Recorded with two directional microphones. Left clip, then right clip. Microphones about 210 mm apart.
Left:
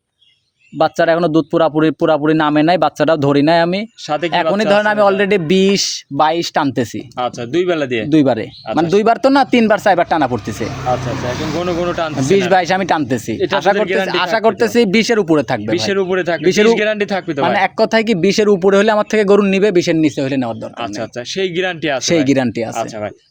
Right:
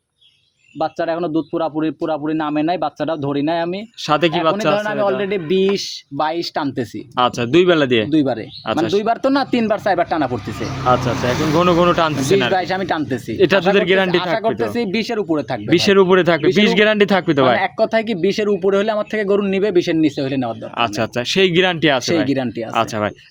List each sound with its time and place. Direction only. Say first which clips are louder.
0.8 s speech: left 7 dB; 55° left (ahead or behind)
7.2 s speech: right 3 dB; 25° right (ahead or behind)
8.1 s speech: left 5 dB; 40° left (ahead or behind)
11.5 s speech: right 5 dB; 30° right (ahead or behind)
12.3 s speech: left 4 dB; 40° left (ahead or behind)
13.4 s speech: right 1 dB; 30° right (ahead or behind)
14.3 s speech: left 6 dB; 45° left (ahead or behind)
15.7 s speech: right 6 dB; 30° right (ahead or behind)
17.5 s speech: left 3 dB; 40° left (ahead or behind)
20.7 s speech: right 4 dB; 35° right (ahead or behind)
22.0 s speech: left 4 dB; 40° left (ahead or behind)
22.8 s speech: right 3 dB; 35° right (ahead or behind)